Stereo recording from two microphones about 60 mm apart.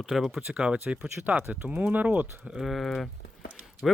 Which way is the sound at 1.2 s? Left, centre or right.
Right.